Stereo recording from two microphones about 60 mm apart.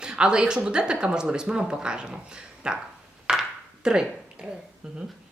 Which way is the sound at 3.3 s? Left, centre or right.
Centre.